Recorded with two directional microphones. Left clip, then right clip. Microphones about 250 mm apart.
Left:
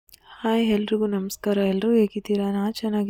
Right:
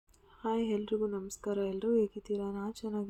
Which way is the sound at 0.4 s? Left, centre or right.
Left.